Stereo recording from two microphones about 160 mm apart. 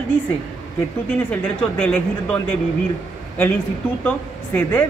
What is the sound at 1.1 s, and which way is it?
A man's voice, 10° left (ahead or behind).